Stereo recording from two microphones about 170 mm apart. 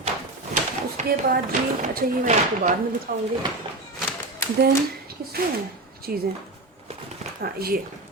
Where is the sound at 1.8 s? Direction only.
45° right (ahead or behind).